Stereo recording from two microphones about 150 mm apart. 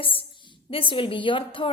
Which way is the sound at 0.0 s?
35° left (ahead or behind).